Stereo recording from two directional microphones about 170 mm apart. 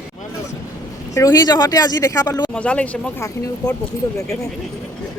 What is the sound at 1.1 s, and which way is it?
Speech, 20° left (ahead or behind).